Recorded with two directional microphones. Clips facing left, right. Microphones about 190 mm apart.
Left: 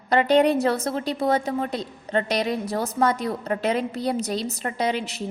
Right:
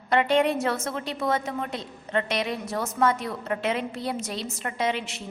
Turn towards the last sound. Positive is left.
turn(degrees=35)  # may be behind; listen again after turning